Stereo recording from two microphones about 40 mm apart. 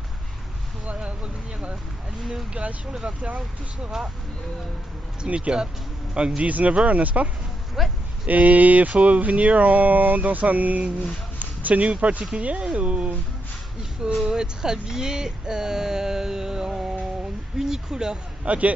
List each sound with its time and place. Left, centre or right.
0.8 s speech: right
5.2 s speech: right
6.4 s speech: right
7.8 s speech: centre
8.3 s speech: right
14.2 s speech: centre